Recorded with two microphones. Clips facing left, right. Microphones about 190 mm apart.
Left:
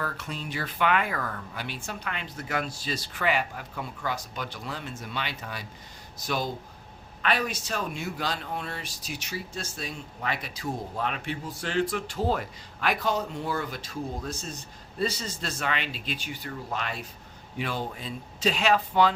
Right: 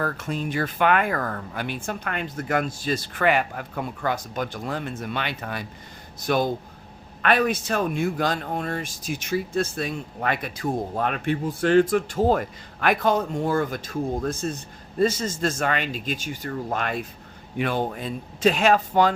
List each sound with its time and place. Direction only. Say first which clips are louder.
0.0 s speech: right 7 dB; 50° right (ahead or behind)